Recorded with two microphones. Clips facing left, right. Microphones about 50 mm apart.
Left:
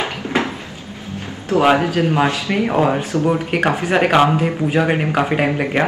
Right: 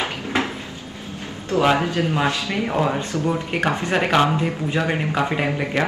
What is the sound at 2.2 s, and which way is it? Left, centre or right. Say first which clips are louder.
Speech: left 4 dB; left.